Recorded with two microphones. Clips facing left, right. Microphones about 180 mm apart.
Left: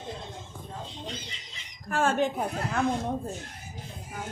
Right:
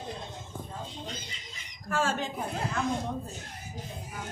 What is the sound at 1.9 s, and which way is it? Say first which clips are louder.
Speech: left 4 dB; 60° left (ahead or behind).